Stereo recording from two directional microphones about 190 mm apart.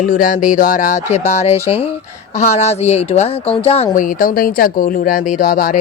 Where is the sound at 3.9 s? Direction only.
50° left (ahead or behind).